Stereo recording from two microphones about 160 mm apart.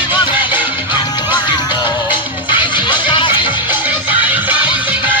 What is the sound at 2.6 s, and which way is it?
Music, 30° left (ahead or behind).